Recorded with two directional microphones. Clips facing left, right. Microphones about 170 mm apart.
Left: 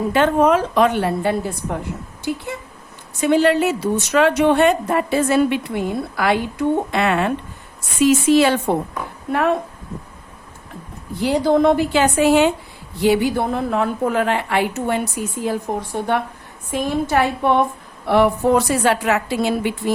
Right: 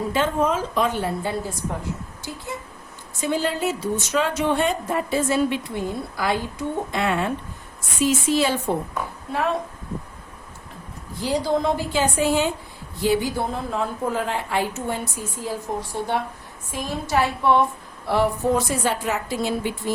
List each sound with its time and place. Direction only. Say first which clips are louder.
0.1 s a woman's voice: left 8 dB; 65° left (ahead or behind)
11.2 s a woman's voice: left 6 dB; 60° left (ahead or behind)